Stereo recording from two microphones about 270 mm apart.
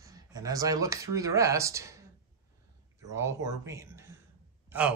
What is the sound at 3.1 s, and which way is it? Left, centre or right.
Speech, centre.